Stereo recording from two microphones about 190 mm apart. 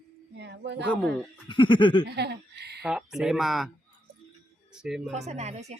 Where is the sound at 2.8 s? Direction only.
5° right (ahead or behind).